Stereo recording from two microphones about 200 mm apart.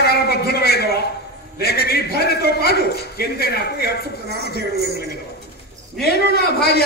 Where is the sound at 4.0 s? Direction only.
50° left (ahead or behind).